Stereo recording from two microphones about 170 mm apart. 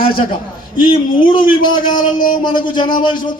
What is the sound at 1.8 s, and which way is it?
Speech, 50° left (ahead or behind).